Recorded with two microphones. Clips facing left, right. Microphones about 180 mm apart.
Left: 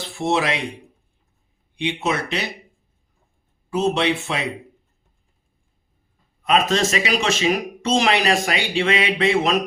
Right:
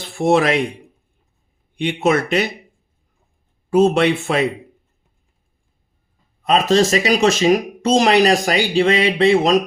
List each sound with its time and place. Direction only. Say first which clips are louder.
0.2 s speech: right 6 dB; 50° right (ahead or behind)
1.7 s speech: right 6 dB; 50° right (ahead or behind)
3.7 s speech: right 6 dB; 50° right (ahead or behind)
6.4 s speech: right 4 dB; 35° right (ahead or behind)